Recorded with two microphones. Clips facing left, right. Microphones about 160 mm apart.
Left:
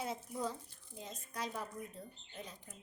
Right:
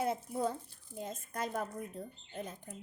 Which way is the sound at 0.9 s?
50° right (ahead or behind).